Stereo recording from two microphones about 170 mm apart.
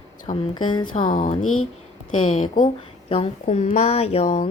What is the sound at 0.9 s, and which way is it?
Speech, 50° left (ahead or behind).